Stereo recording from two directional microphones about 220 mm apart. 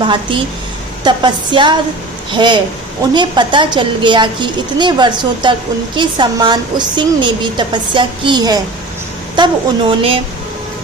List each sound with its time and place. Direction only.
0.0 s a woman's voice: 20° right (ahead or behind)